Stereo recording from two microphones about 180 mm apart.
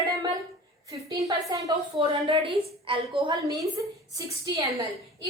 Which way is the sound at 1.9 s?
30° right (ahead or behind).